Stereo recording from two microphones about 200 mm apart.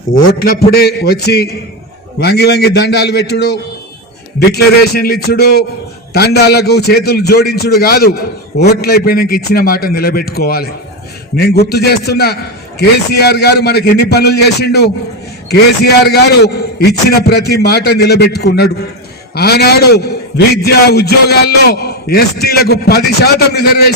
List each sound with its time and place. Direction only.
0.3 s a man's voice: 50° left (ahead or behind)